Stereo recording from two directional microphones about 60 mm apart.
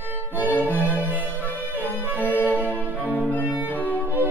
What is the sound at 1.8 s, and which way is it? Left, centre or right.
Music, left.